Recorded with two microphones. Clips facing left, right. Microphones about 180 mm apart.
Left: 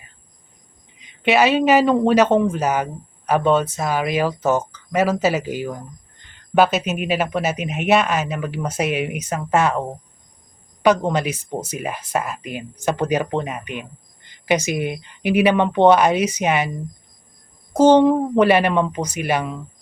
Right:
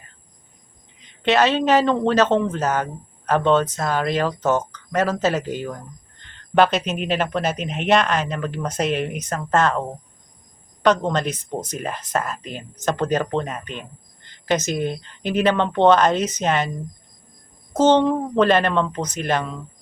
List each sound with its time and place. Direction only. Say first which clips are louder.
1.0 s speech: left 1 dB; 10° left (ahead or behind)
10.8 s speech: left 2 dB; 10° left (ahead or behind)
17.7 s speech: left 4 dB; 10° left (ahead or behind)